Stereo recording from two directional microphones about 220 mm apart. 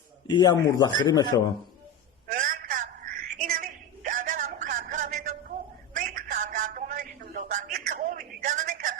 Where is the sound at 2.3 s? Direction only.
40° right (ahead or behind).